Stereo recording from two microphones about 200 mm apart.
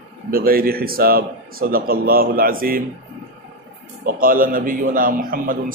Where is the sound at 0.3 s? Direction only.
45° right (ahead or behind).